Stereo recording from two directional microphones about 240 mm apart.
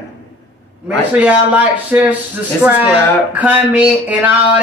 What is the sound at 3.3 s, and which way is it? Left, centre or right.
Speech, centre.